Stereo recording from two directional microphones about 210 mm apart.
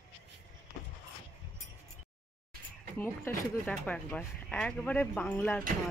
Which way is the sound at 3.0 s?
10° left (ahead or behind).